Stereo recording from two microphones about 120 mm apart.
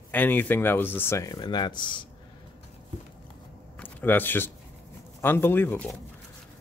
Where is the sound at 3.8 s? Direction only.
15° left (ahead or behind).